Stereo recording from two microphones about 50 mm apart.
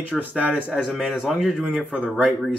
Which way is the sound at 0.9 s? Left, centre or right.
Centre.